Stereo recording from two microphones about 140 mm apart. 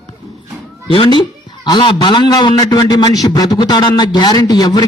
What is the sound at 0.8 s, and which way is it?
A man's voice, 35° left (ahead or behind).